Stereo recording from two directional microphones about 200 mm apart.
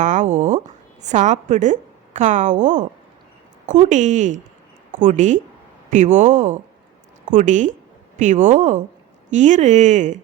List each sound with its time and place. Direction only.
0.0 s a woman's voice: 35° right (ahead or behind)